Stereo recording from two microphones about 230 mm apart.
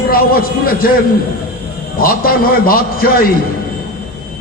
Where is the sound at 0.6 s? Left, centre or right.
Left.